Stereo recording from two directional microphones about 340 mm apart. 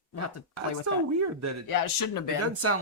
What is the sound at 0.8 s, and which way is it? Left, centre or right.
Speech, right.